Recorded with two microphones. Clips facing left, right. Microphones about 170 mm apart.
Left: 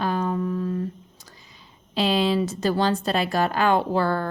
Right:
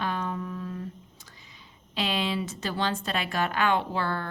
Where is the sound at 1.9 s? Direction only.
35° left (ahead or behind).